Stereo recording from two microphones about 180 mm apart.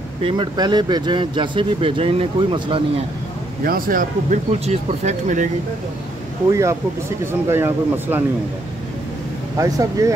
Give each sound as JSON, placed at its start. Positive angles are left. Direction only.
{"t": 0.2, "sound": "speech", "side_deg": -30}
{"t": 3.6, "sound": "speech", "side_deg": -50}
{"t": 6.5, "sound": "speech", "side_deg": -15}
{"t": 9.6, "sound": "speech", "side_deg": -20}